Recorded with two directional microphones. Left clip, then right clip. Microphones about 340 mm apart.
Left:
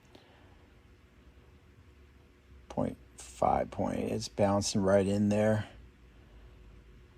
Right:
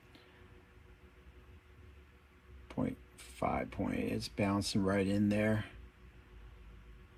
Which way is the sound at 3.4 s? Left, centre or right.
Centre.